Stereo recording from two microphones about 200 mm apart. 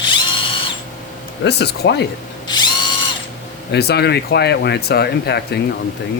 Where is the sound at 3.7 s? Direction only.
55° left (ahead or behind).